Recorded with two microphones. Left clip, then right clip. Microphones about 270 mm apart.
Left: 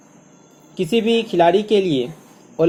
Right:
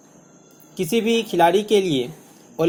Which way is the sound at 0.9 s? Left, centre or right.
Right.